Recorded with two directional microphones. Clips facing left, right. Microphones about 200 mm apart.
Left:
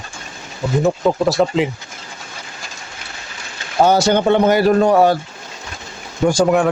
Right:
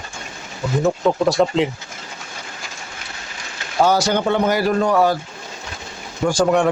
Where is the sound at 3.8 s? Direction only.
25° left (ahead or behind).